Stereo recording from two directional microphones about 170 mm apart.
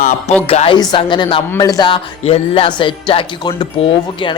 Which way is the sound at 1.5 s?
20° left (ahead or behind).